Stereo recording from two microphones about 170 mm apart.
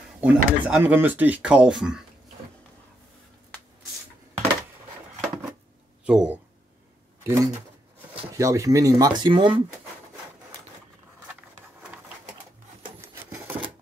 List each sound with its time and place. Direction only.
0.2 s speech: 5° right (ahead or behind)
6.0 s speech: 5° right (ahead or behind)
7.2 s speech: 20° right (ahead or behind)